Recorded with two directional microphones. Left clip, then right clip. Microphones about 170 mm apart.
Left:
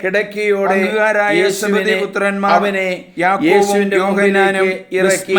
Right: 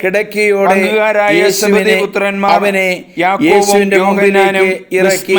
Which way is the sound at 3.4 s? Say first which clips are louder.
Right 5 dB; 45° right (ahead or behind).